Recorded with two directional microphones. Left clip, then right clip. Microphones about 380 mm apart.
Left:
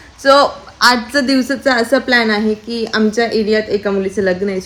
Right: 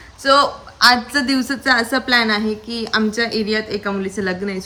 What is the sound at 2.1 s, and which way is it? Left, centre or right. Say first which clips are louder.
A woman's voice: left 3 dB; centre.